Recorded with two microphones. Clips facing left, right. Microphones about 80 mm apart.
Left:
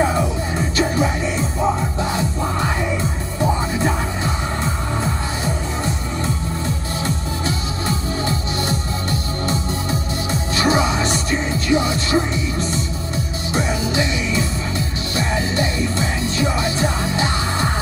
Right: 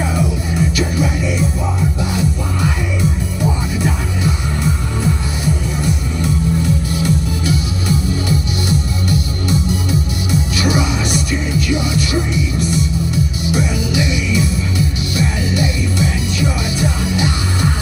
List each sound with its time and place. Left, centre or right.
0.0 s music: left